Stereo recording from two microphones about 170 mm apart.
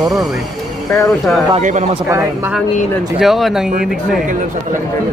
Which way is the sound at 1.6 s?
50° right (ahead or behind).